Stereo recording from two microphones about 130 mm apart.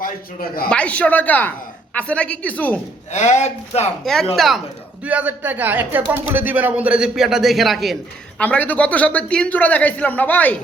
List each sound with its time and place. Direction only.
0.7 s a man's voice: 10° left (ahead or behind)
3.1 s speech: 65° left (ahead or behind)
4.0 s speech: 5° left (ahead or behind)
5.0 s speech: 10° right (ahead or behind)
8.4 s a man's voice: 10° left (ahead or behind)